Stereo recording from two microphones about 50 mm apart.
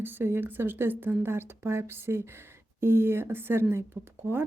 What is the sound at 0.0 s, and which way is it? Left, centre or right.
A woman's voice, right.